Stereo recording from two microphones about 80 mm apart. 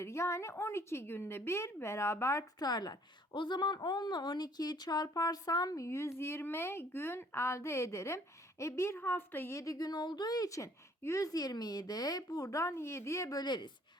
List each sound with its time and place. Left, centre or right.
0.0 s a woman's voice: left
2.6 s speech: left
3.3 s speech: left
9.6 s a woman's voice: left
13.3 s speech: left